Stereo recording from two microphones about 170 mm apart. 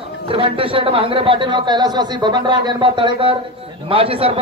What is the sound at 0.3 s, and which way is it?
A man's voice, 30° right (ahead or behind).